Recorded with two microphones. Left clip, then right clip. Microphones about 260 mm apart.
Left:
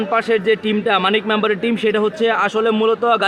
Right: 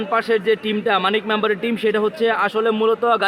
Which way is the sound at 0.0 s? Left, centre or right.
Centre.